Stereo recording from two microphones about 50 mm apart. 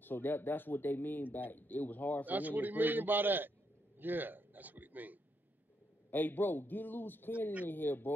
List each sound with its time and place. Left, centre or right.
0.0 s speech: left
2.2 s a man's voice: right
6.0 s speech: left